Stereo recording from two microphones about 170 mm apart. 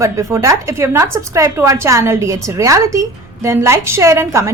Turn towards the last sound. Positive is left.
turn(degrees=-15)  # may be behind; listen again after turning